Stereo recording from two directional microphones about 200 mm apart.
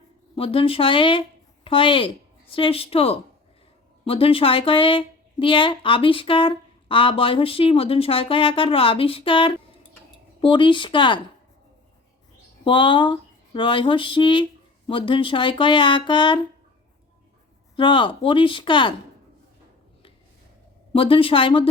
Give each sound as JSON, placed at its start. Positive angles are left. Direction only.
{"t": 0.3, "sound": "speech", "side_deg": 25}
{"t": 12.6, "sound": "speech", "side_deg": 25}
{"t": 17.7, "sound": "speech", "side_deg": 25}
{"t": 20.9, "sound": "speech", "side_deg": 25}